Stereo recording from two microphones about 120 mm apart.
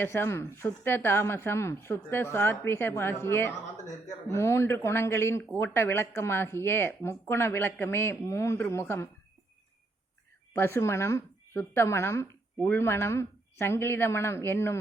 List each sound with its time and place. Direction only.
0.0 s speech: 20° left (ahead or behind)
10.5 s speech: 20° left (ahead or behind)